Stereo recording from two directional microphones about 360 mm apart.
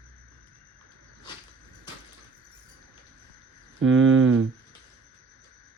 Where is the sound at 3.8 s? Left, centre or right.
Right.